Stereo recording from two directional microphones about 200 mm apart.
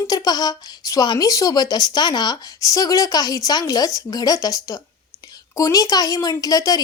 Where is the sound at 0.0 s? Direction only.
20° left (ahead or behind).